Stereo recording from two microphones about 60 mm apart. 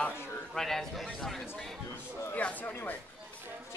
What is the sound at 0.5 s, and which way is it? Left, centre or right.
Speech, centre.